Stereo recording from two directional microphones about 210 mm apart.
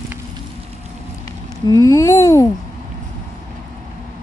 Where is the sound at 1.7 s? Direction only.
15° left (ahead or behind).